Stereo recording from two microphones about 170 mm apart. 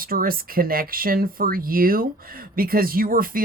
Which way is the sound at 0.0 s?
60° right (ahead or behind).